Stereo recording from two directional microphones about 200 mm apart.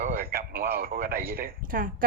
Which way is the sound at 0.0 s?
45° right (ahead or behind).